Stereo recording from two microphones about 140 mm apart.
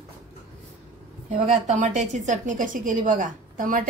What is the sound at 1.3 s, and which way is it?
Speech, 45° right (ahead or behind).